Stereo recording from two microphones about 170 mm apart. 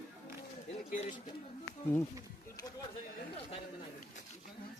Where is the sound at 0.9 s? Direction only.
50° left (ahead or behind).